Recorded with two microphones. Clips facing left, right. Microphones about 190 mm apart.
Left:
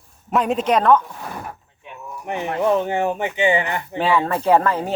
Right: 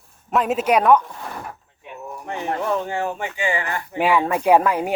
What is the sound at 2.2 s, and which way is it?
Speech, 20° left (ahead or behind).